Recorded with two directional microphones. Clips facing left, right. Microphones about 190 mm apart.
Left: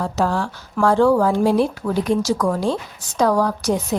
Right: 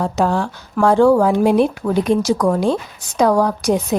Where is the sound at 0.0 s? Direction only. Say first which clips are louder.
Right 3 dB; 20° right (ahead or behind).